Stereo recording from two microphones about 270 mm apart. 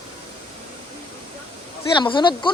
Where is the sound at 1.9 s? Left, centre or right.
Centre.